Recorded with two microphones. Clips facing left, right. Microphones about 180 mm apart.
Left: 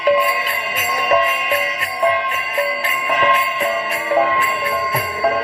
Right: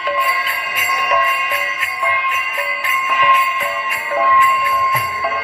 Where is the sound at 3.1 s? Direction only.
35° left (ahead or behind).